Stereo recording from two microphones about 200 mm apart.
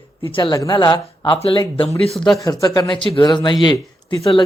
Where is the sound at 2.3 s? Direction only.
15° left (ahead or behind).